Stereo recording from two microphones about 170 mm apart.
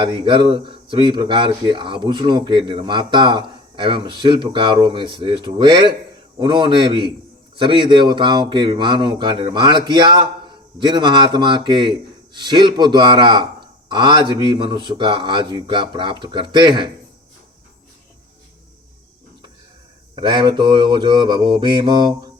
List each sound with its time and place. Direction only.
0.0 s a man's voice: 30° right (ahead or behind)
20.1 s a man's voice: 25° right (ahead or behind)